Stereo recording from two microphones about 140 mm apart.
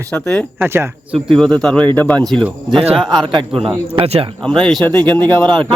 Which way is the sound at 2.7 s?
40° right (ahead or behind).